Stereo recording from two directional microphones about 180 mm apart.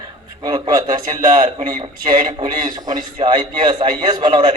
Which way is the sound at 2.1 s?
25° right (ahead or behind).